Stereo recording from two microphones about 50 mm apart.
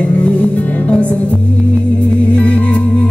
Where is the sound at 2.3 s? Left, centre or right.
Left.